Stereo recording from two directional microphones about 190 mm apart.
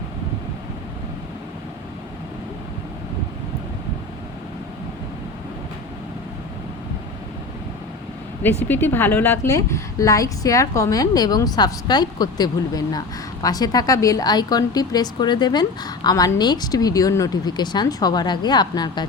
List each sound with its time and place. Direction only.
8.6 s a woman's voice: 10° left (ahead or behind)